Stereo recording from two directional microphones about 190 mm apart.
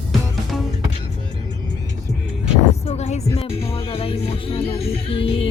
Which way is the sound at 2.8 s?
35° left (ahead or behind).